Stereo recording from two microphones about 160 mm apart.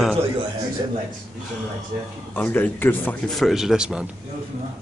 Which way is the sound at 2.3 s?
10° left (ahead or behind).